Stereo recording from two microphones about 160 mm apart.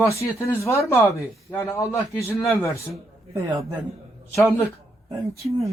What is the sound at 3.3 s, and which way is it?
Speech, 20° right (ahead or behind).